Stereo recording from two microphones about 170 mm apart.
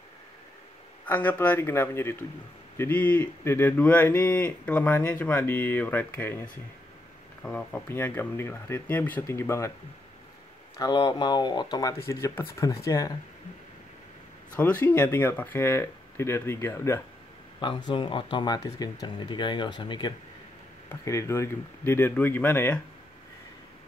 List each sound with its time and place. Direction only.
1.0 s speech: 10° left (ahead or behind)
10.8 s speech: 25° left (ahead or behind)
14.6 s speech: 10° left (ahead or behind)
17.6 s speech: 25° left (ahead or behind); by 22.8 s 10° left (ahead or behind)